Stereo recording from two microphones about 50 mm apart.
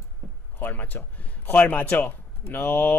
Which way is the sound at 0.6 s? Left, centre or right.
Left.